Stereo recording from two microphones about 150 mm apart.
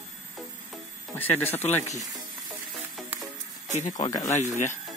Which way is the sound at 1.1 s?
15° left (ahead or behind).